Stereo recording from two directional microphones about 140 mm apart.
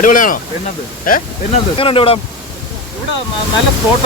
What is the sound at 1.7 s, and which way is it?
Speech, 40° left (ahead or behind).